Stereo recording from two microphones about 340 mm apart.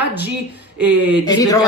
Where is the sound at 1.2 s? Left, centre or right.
Centre.